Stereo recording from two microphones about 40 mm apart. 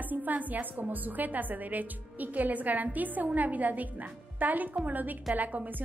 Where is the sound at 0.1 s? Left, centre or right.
Right.